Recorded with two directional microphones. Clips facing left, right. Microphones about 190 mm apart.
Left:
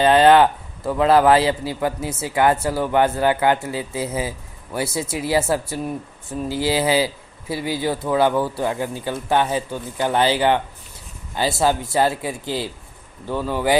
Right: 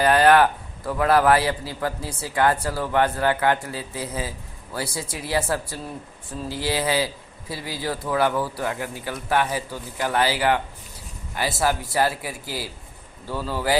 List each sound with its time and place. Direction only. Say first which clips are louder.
0.0 s a man's voice: left 3 dB; 25° left (ahead or behind)
11.6 s a man's voice: left 3 dB; 25° left (ahead or behind)